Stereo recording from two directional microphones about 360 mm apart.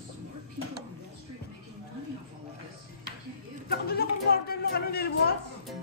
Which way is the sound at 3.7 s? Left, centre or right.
Left.